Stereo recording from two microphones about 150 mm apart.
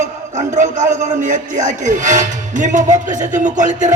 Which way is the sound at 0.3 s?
55° right (ahead or behind).